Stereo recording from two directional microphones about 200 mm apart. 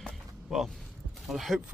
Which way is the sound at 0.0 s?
Centre (ahead or behind).